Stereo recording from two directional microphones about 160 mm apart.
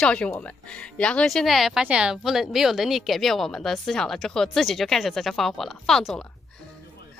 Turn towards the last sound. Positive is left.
turn(degrees=5)  # may be behind; listen again after turning